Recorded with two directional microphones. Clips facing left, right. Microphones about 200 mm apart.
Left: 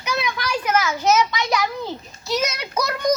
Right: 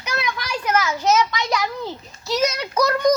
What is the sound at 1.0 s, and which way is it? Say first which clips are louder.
Speech: left 1 dB; 5° left (ahead or behind).